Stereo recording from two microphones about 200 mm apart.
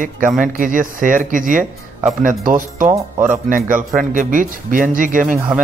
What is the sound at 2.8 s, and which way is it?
Speech, 15° right (ahead or behind).